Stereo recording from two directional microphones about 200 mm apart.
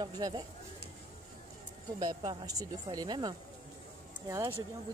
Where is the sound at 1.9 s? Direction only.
20° right (ahead or behind).